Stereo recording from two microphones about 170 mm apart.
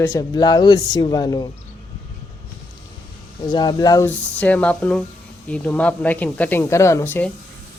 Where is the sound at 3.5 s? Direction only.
25° left (ahead or behind).